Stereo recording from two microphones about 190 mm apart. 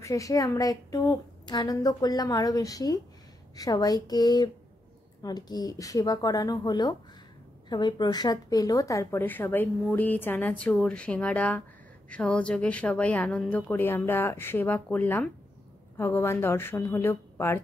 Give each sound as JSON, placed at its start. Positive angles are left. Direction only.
{"t": 0.0, "sound": "a woman's voice", "side_deg": 15}